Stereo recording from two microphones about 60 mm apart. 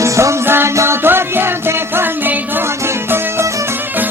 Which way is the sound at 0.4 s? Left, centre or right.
Right.